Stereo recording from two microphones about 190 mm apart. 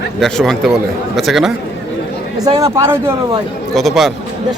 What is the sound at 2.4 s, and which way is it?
Speech, 15° right (ahead or behind).